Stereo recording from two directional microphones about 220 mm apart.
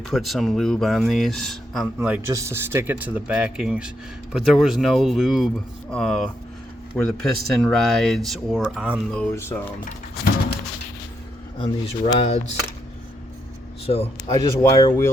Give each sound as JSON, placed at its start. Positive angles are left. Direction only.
{"t": 0.1, "sound": "speech", "side_deg": 0}
{"t": 11.6, "sound": "speech", "side_deg": 25}
{"t": 13.8, "sound": "speech", "side_deg": 25}